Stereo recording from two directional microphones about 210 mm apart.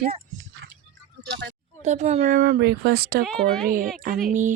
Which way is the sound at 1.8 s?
35° right (ahead or behind).